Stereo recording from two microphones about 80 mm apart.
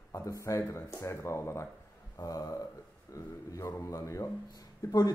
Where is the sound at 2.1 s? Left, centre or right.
Left.